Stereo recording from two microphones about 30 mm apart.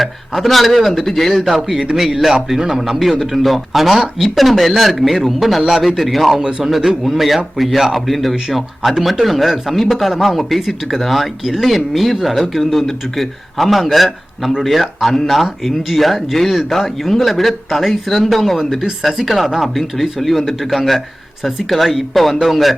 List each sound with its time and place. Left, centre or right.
0.0 s a man's voice: centre
1.4 s a man's voice: centre
1.9 s a man's voice: right
3.0 s a man's voice: centre
10.1 s a man's voice: centre